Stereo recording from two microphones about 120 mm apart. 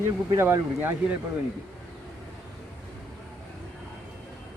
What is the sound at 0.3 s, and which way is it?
Speech, 20° right (ahead or behind).